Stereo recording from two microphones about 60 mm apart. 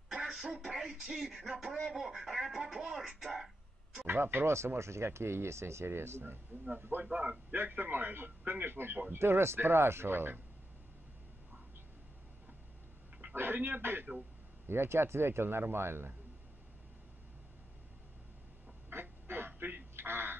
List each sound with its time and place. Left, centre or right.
0.1 s a sound: centre
0.7 s music: centre
1.9 s speech: centre
4.1 s speech: right
13.3 s speech: right
18.9 s quack: right